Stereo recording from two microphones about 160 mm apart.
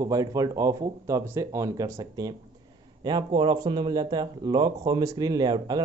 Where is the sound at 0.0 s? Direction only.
20° right (ahead or behind).